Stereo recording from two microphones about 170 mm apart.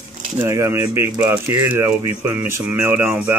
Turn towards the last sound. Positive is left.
turn(degrees=-10)  # may be behind; listen again after turning